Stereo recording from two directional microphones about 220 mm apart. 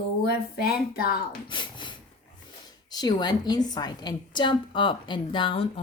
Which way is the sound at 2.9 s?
20° left (ahead or behind).